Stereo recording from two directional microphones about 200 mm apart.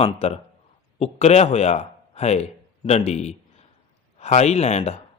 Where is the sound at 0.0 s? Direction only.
30° left (ahead or behind).